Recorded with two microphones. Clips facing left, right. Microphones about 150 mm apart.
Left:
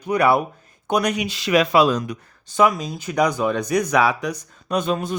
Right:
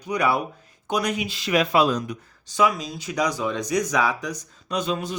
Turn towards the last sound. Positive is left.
turn(degrees=50)  # may be behind; listen again after turning